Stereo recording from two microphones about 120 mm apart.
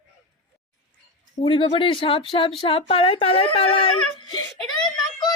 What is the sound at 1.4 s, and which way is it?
Speech, 50° left (ahead or behind).